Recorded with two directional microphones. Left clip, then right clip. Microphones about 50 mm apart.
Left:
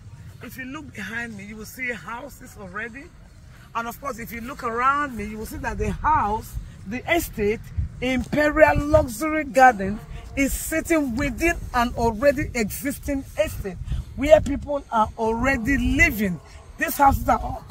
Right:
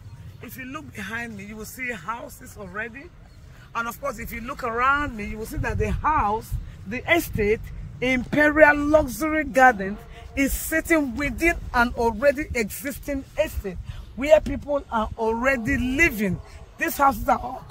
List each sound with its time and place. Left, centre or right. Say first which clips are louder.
0.6 s speech: left 1 dB; centre
10.4 s speech: even; centre
13.0 s speech: left 1 dB; right
13.8 s a sound: left 2 dB; right
14.5 s speech: left 1 dB; right